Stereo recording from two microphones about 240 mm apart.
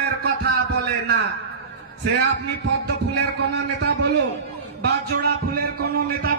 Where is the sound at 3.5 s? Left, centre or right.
Right.